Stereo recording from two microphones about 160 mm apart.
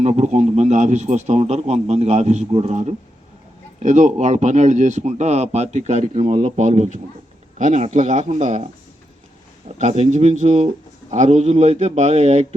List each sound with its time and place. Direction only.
0.0 s speech: 45° right (ahead or behind)
9.7 s speech: 45° right (ahead or behind)